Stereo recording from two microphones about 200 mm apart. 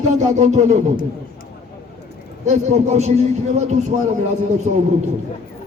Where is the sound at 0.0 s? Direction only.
35° right (ahead or behind).